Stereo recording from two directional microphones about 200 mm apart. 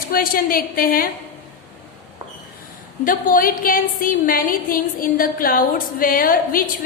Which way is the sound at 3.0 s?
45° left (ahead or behind).